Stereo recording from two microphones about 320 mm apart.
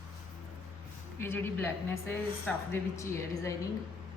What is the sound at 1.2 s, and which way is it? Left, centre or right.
A woman's voice, centre.